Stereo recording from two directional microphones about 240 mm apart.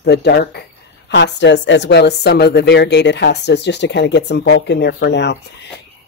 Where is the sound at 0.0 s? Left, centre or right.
Left.